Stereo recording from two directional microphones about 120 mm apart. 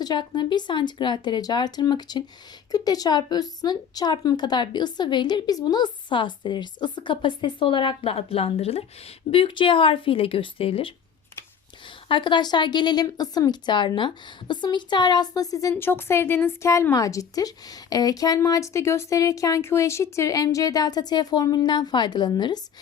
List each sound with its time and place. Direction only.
0.0 s speech: 40° left (ahead or behind)
12.0 s speech: 40° left (ahead or behind)
15.7 s a woman's voice: 20° left (ahead or behind); by 22.6 s 35° left (ahead or behind)